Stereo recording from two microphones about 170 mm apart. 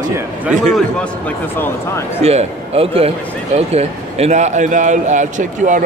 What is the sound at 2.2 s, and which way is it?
A man's voice, 35° right (ahead or behind).